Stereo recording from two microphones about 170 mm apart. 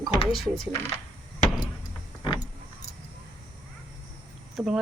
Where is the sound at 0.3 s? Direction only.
Centre (ahead or behind).